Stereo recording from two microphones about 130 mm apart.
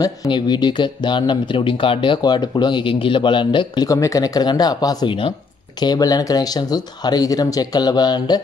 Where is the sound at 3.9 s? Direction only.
25° left (ahead or behind).